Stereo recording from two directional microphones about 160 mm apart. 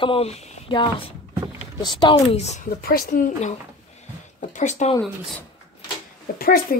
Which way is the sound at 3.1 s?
50° left (ahead or behind).